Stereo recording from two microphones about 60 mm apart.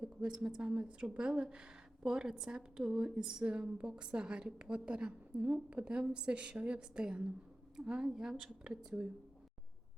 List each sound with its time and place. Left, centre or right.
0.0 s a woman's voice: centre